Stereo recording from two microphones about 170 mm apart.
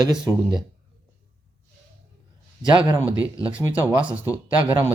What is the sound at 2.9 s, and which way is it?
Speech, 10° right (ahead or behind).